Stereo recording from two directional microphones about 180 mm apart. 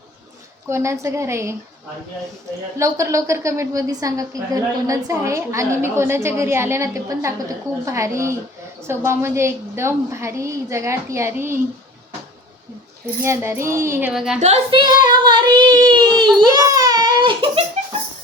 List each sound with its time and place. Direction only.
0.7 s a woman's voice: 15° right (ahead or behind)
2.7 s a woman's voice: 15° right (ahead or behind)
13.2 s a woman's voice: 15° right (ahead or behind)
14.1 s a woman's voice: 5° right (ahead or behind)
14.3 s child singing: 40° right (ahead or behind)
16.4 s babbling: 20° right (ahead or behind)